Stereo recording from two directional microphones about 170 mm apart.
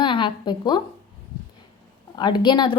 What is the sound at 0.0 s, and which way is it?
Speech, 30° left (ahead or behind).